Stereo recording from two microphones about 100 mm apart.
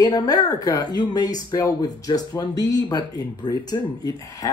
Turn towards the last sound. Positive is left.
turn(degrees=40)  # may be behind; listen again after turning